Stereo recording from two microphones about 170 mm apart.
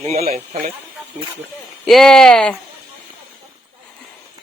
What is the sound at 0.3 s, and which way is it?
Speech, 50° right (ahead or behind).